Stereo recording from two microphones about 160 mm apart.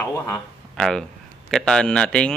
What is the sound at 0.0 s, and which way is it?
Speech, 5° left (ahead or behind).